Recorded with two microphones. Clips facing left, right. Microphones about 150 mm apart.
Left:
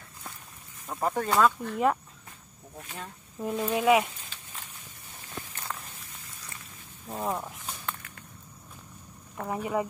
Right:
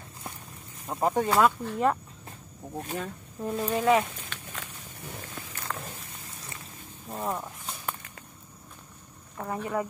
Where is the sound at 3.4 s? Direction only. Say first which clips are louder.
Even; 5° left (ahead or behind).